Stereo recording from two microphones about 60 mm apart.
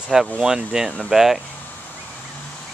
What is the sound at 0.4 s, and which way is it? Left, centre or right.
Speech, centre.